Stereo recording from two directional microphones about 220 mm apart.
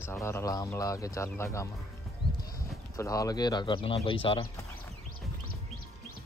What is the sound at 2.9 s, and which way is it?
Speech, 15° left (ahead or behind).